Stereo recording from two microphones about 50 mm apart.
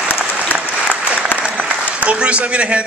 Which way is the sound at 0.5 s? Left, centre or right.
Left.